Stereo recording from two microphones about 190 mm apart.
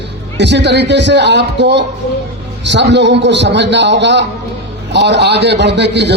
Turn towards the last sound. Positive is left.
turn(degrees=-65)  # may be behind; listen again after turning